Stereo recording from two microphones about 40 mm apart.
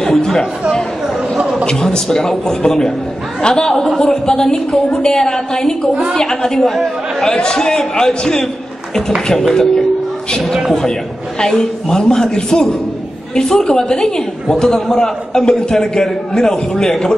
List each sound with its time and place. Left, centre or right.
0.0 s chatter: centre
1.7 s a man's voice: centre
4.0 s a man's voice: centre
9.5 s a man's voice: centre